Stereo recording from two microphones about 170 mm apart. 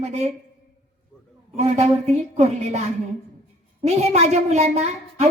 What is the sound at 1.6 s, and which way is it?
A woman's voice, 40° right (ahead or behind).